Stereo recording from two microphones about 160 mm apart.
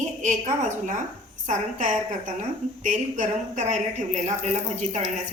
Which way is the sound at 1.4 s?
50° right (ahead or behind).